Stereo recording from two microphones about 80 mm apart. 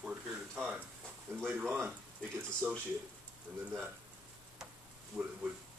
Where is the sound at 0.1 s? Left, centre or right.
Centre.